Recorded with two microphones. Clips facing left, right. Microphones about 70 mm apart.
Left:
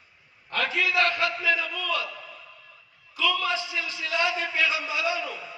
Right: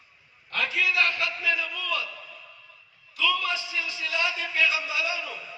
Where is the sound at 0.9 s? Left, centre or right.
Left.